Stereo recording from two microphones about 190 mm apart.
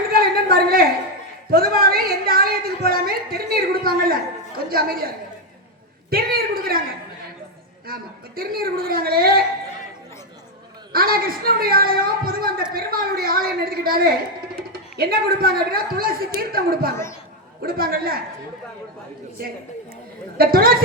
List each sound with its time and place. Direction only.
0.1 s a sound: 50° right (ahead or behind)
6.1 s a man's voice: 50° right (ahead or behind)
8.4 s a man's voice: 50° right (ahead or behind)
10.9 s a man's voice: 50° right (ahead or behind)
16.9 s speech: 15° left (ahead or behind)
17.6 s a man's voice: 50° right (ahead or behind)
20.4 s a man's voice: 50° right (ahead or behind)